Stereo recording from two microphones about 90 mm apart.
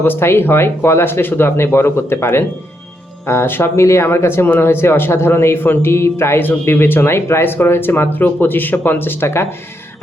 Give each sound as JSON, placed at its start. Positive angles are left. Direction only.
{"t": 0.0, "sound": "speech", "side_deg": 25}